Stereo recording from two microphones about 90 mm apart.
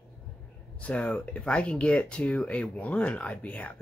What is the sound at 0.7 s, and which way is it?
Speech, 15° left (ahead or behind).